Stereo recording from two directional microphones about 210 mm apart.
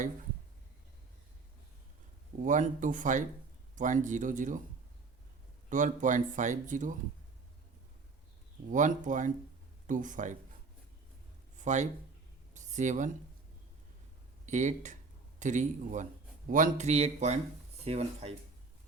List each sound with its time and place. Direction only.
2.4 s speech: 35° right (ahead or behind)
5.6 s speech: 35° right (ahead or behind)
8.7 s speech: 35° right (ahead or behind)
11.6 s speech: 35° right (ahead or behind)
12.5 s a sound: 35° right (ahead or behind)
14.4 s speech: 35° right (ahead or behind)